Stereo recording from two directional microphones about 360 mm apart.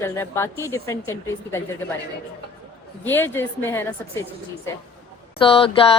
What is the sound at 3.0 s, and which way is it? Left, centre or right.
Speech, centre.